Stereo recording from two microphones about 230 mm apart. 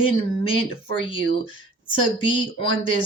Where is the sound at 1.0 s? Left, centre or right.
Left.